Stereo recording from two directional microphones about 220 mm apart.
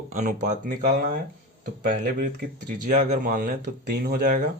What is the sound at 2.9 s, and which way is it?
Speech, 35° right (ahead or behind).